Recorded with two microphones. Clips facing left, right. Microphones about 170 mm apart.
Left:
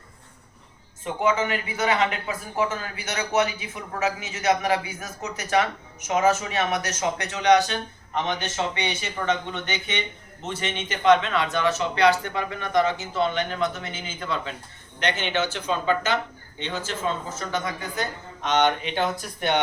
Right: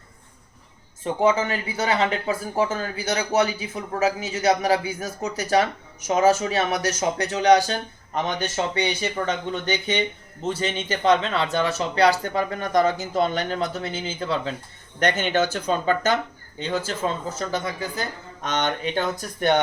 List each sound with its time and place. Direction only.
1.0 s speech: 30° right (ahead or behind)
14.9 s speech: 45° right (ahead or behind)